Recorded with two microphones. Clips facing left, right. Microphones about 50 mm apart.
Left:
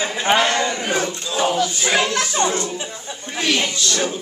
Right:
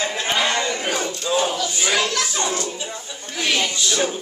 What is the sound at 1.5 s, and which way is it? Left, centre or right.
Speech, left.